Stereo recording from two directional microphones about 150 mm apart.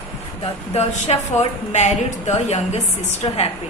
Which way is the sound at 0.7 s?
45° left (ahead or behind).